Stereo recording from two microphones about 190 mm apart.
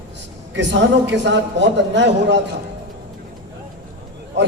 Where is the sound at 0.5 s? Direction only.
70° right (ahead or behind).